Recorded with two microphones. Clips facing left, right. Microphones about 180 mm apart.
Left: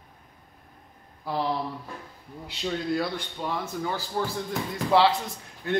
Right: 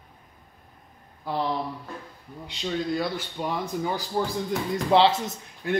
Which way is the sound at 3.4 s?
15° right (ahead or behind).